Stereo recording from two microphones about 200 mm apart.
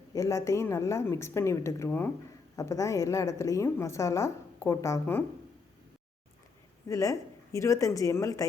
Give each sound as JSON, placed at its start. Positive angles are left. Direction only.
{"t": 0.1, "sound": "a woman's voice", "side_deg": 15}
{"t": 6.8, "sound": "a woman's voice", "side_deg": 15}